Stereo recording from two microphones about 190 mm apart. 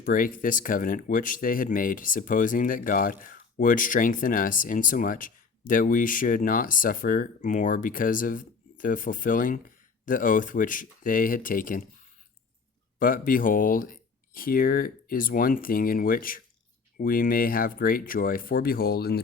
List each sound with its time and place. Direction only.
0.0 s speech: 45° left (ahead or behind)